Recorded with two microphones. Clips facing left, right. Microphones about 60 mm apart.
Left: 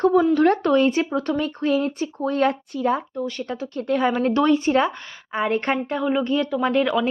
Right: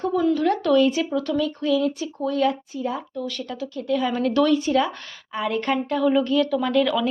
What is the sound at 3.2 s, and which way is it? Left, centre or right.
A woman's voice, left.